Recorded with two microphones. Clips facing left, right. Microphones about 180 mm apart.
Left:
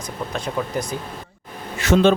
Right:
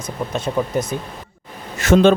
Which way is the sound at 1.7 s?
50° right (ahead or behind).